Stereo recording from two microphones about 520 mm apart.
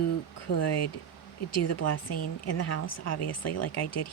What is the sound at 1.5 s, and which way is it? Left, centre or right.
Speech, left.